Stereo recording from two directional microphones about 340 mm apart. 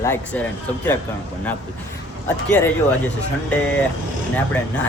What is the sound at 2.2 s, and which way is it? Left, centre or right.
Speech, centre.